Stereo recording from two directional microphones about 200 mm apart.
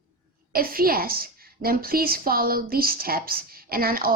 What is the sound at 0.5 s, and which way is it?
A woman's voice, 45° right (ahead or behind).